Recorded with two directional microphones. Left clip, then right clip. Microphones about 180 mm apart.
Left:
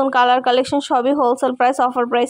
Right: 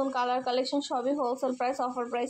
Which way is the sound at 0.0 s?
45° left (ahead or behind).